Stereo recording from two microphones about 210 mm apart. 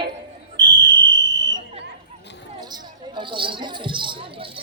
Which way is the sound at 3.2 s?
25° right (ahead or behind).